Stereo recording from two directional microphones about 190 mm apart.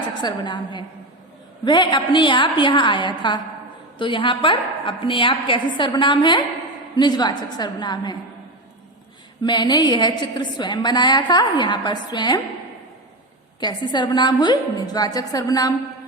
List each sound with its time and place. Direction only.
0.1 s a woman's voice: 20° left (ahead or behind)
9.4 s a woman's voice: 20° left (ahead or behind)
13.6 s a woman's voice: 20° left (ahead or behind)